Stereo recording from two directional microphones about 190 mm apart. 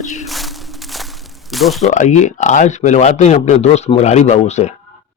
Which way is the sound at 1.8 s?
40° left (ahead or behind).